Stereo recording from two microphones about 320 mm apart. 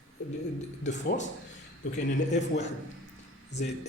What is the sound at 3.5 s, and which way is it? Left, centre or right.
Speech, left.